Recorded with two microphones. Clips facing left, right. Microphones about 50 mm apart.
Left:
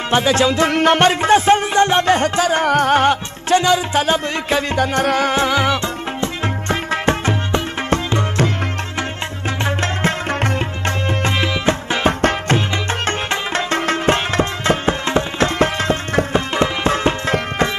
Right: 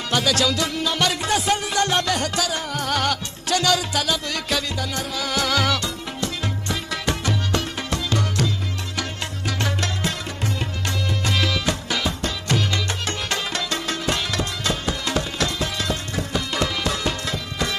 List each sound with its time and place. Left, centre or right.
0.1 s music: left
0.7 s music: left
2.6 s music: left
5.3 s music: left
9.7 s music: left
12.1 s music: left
12.5 s music: left